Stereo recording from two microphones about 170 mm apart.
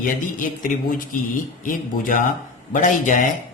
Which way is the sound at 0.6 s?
50° left (ahead or behind).